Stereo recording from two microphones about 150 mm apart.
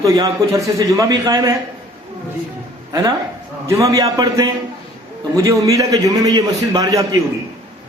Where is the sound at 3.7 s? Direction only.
20° right (ahead or behind).